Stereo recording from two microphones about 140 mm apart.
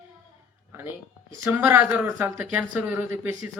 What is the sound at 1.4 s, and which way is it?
Speech, 15° right (ahead or behind).